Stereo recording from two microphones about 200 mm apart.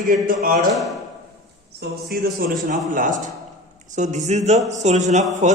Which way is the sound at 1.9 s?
45° right (ahead or behind).